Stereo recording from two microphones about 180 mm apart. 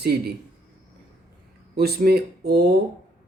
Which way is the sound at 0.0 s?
60° right (ahead or behind).